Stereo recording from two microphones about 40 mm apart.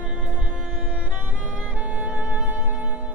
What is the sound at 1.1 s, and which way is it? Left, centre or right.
Music, right.